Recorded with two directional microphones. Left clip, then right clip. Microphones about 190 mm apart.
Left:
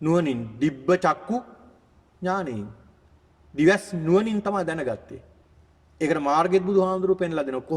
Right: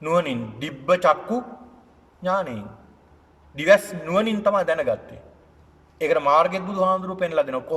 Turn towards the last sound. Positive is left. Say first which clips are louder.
# right 4 dB
turn(degrees=35)  # may be behind; listen again after turning